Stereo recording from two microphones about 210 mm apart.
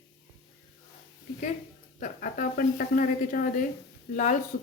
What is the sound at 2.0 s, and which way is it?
Speech, 40° left (ahead or behind).